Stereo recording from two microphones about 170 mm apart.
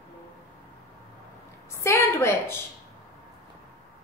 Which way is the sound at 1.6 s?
15° left (ahead or behind).